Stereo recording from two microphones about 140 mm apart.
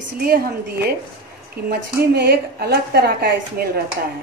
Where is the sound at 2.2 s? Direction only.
90° right.